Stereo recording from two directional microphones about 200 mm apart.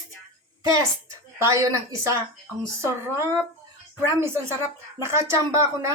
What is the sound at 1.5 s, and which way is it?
Speech, 15° right (ahead or behind).